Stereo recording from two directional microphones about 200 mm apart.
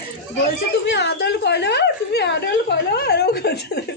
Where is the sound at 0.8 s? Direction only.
60° left (ahead or behind).